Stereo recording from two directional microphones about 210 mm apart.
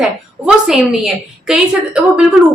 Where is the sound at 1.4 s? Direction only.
5° right (ahead or behind).